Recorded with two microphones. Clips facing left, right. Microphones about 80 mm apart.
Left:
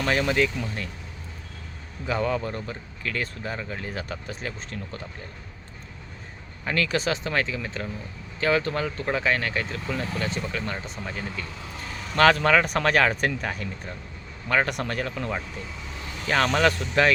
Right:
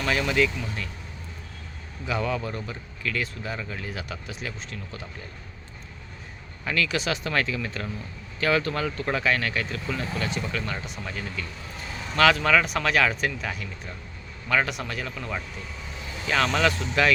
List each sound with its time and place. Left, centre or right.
0.0 s speech: left
2.0 s speech: left
6.7 s speech: left
7.3 s speech: left
10.2 s speech: left
12.1 s speech: left